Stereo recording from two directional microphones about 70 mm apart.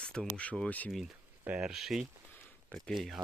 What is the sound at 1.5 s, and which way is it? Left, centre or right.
Speech, centre.